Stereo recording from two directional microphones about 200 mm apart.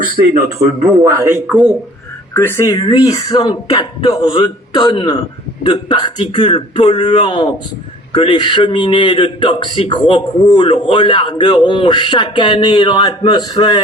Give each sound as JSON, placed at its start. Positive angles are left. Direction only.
{"t": 1.0, "sound": "a man's voice", "side_deg": -15}
{"t": 2.3, "sound": "a man's voice", "side_deg": 10}
{"t": 7.3, "sound": "a man's voice", "side_deg": 20}